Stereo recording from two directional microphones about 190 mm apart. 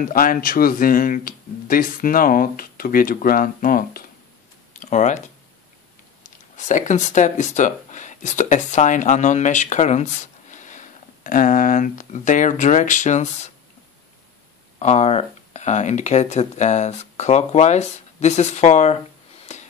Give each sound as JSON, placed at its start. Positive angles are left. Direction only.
{"t": 0.0, "sound": "speech", "side_deg": 50}
{"t": 14.8, "sound": "speech", "side_deg": 35}
{"t": 19.5, "sound": "a sound", "side_deg": 35}